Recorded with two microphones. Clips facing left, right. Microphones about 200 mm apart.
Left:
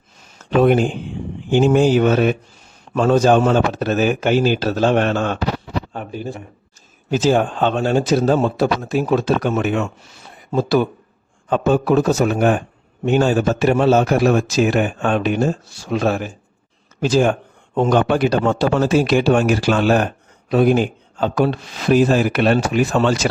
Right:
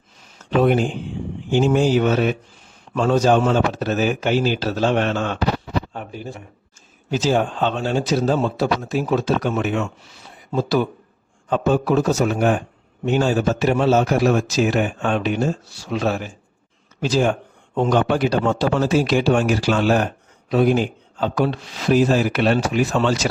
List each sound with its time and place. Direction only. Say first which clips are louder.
0.5 s a man's voice: left 3 dB; 55° left (ahead or behind)